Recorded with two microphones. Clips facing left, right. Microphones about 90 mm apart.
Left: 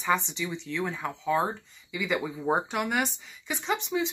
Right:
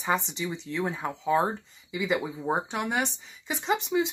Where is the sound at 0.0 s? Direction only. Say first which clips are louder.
Left 1 dB; 35° right (ahead or behind).